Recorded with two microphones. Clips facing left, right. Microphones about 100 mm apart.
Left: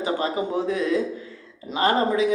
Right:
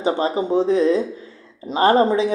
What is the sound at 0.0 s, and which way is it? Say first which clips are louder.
Speech: right 4 dB; 30° right (ahead or behind).